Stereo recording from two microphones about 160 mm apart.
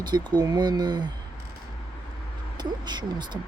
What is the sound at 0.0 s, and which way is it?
Speech, 25° right (ahead or behind).